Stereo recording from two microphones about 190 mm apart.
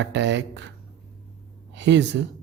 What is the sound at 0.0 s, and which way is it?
Speech, 70° right (ahead or behind).